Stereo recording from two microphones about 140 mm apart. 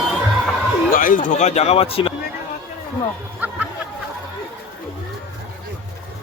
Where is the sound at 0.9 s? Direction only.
75° left (ahead or behind); by 2.1 s 45° left (ahead or behind).